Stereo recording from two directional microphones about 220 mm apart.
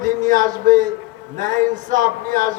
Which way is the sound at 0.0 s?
35° right (ahead or behind).